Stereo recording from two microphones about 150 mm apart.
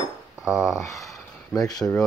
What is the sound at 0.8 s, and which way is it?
Speech, 20° left (ahead or behind).